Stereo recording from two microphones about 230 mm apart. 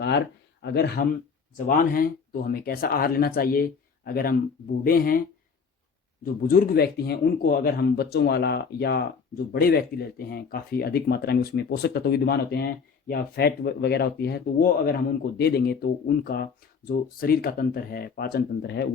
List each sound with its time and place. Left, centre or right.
0.6 s speech: left
1.5 s speech: left
6.2 s speech: left